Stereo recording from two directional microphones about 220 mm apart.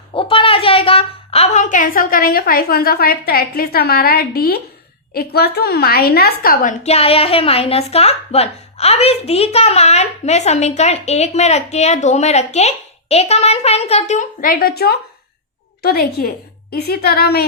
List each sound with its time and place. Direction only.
0.1 s a woman's voice: 25° left (ahead or behind); by 17.4 s 45° left (ahead or behind)